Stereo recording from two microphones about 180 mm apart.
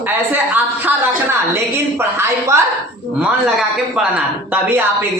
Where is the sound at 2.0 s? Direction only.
15° right (ahead or behind).